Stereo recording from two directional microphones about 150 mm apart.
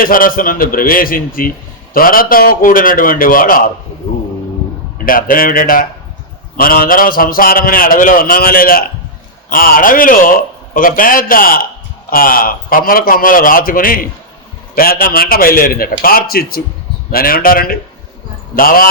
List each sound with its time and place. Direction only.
0.0 s a man's voice: 70° left (ahead or behind)
5.0 s a man's voice: 70° left (ahead or behind); by 16.6 s 85° left
17.1 s a man's voice: 75° left (ahead or behind)